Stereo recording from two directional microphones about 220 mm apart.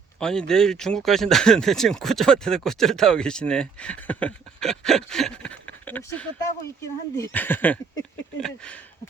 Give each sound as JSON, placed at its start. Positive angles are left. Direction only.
{"t": 0.2, "sound": "speech", "side_deg": 5}